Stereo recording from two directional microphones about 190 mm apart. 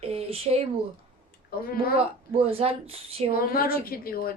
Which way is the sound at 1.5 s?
50° left (ahead or behind).